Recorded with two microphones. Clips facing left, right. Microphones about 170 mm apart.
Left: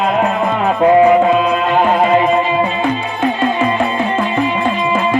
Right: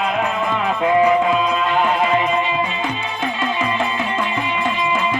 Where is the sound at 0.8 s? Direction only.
40° left (ahead or behind).